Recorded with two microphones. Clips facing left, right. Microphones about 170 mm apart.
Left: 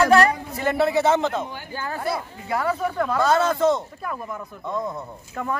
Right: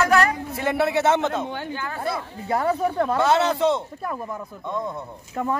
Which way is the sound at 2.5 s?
30° right (ahead or behind).